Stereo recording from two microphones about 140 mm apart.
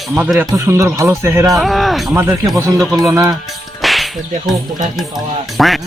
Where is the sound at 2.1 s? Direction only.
15° right (ahead or behind).